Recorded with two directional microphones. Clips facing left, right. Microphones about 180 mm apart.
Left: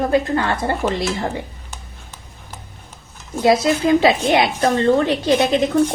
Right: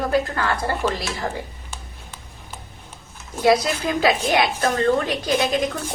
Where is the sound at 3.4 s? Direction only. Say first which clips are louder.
Left 3 dB; 25° left (ahead or behind).